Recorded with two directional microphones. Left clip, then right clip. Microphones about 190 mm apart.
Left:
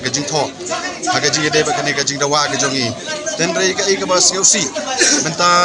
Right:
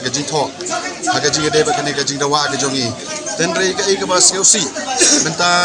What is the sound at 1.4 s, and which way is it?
Speech, 35° left (ahead or behind).